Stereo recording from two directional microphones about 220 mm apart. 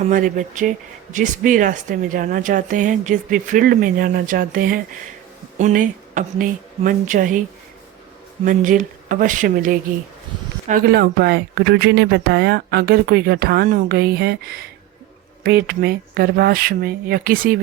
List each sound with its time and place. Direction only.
0.0 s speech: 35° right (ahead or behind)
8.4 s speech: 35° right (ahead or behind)